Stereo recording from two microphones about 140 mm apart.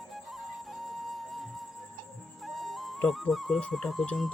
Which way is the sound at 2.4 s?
Centre (ahead or behind).